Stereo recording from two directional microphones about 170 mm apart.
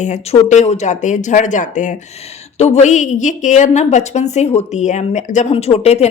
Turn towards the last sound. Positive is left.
turn(degrees=40)  # may be behind; listen again after turning